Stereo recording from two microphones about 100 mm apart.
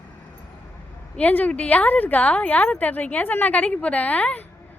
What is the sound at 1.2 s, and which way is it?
A woman's voice, 15° left (ahead or behind).